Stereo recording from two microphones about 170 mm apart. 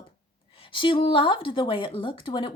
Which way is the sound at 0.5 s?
30° left (ahead or behind).